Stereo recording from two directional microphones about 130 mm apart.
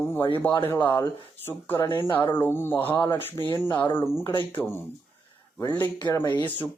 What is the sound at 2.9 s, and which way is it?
Speech, 30° left (ahead or behind).